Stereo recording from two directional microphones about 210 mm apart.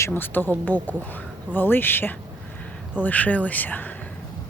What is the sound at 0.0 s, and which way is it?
Speech, 10° left (ahead or behind).